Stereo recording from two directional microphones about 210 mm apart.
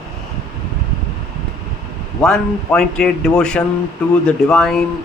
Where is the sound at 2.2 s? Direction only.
5° left (ahead or behind).